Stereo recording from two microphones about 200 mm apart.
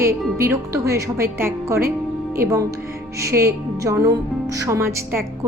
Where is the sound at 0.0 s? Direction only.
15° right (ahead or behind).